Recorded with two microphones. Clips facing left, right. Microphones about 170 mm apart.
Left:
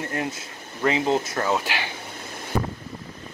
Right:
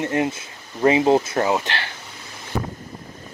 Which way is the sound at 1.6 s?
10° left (ahead or behind).